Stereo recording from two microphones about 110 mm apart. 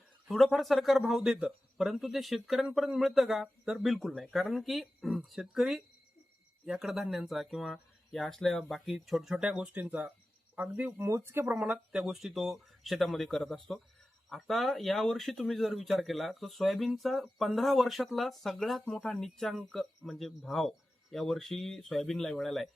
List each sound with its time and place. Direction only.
0.3 s speech: centre (ahead or behind)